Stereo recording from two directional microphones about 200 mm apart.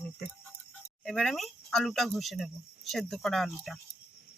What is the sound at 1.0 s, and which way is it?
Speech, centre (ahead or behind).